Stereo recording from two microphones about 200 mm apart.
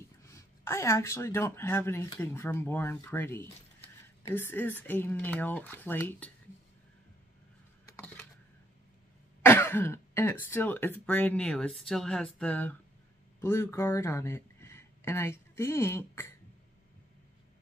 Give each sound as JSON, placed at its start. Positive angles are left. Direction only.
{"t": 0.2, "sound": "a woman's voice", "side_deg": 15}
{"t": 7.8, "sound": "a sound", "side_deg": 15}
{"t": 9.4, "sound": "throat clearing", "side_deg": 10}
{"t": 10.4, "sound": "a woman's voice", "side_deg": 10}